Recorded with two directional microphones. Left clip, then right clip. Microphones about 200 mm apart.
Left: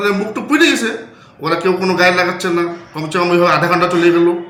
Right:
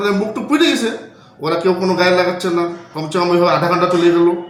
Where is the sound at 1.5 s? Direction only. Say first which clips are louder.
Left 1 dB; centre (ahead or behind).